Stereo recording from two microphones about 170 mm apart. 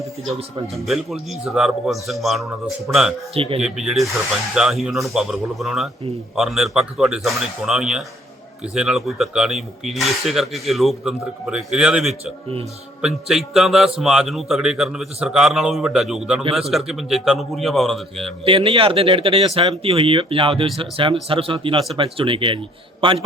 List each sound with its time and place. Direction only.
0.3 s speech: 35° right (ahead or behind)
0.9 s speech: centre (ahead or behind)
3.3 s speech: 35° right (ahead or behind)
3.6 s speech: 5° right (ahead or behind)
16.4 s speech: 30° right (ahead or behind)
16.7 s speech: centre (ahead or behind)
18.4 s speech: 35° right (ahead or behind)